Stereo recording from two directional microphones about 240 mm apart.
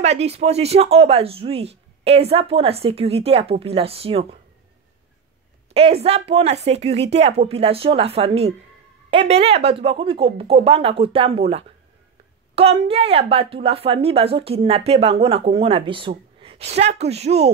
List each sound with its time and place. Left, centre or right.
0.0 s a woman's voice: right
5.7 s a woman's voice: right